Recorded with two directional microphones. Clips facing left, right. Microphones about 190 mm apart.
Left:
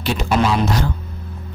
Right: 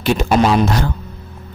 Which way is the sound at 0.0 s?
50° right (ahead or behind).